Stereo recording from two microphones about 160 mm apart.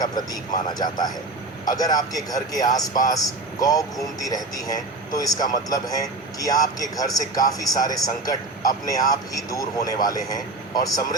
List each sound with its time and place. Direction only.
0.0 s a man's voice: 25° left (ahead or behind)